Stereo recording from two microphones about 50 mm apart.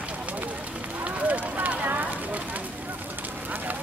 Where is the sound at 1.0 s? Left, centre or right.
Right.